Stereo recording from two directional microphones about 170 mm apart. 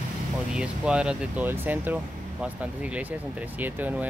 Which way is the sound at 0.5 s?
5° right (ahead or behind).